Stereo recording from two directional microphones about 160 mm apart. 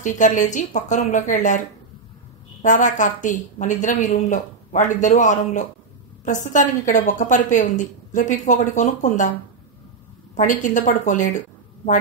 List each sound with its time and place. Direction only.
0.0 s a woman's voice: 50° left (ahead or behind)
2.6 s a woman's voice: 50° left (ahead or behind)
10.3 s speech: 50° left (ahead or behind)